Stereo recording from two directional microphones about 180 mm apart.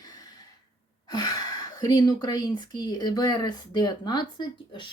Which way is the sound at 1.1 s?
20° left (ahead or behind).